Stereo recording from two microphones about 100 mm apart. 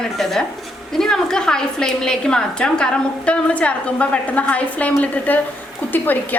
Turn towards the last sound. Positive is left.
turn(degrees=20)  # may be behind; listen again after turning